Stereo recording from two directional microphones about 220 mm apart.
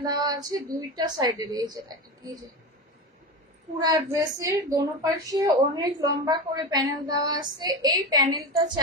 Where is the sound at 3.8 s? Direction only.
15° right (ahead or behind).